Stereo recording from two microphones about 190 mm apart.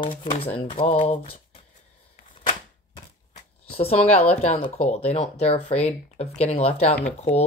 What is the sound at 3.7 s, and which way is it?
Speech, 30° left (ahead or behind).